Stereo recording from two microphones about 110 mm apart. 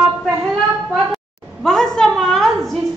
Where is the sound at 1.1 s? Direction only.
5° left (ahead or behind).